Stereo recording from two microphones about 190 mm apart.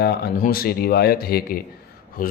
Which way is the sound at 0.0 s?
55° left (ahead or behind).